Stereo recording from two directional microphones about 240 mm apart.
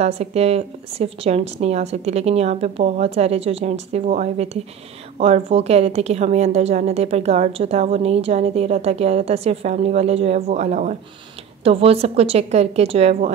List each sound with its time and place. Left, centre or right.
0.0 s a woman's voice: right